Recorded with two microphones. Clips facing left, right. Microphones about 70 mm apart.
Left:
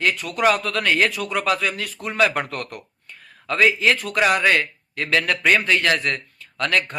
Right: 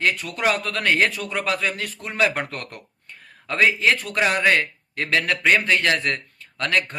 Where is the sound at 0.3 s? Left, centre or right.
Right.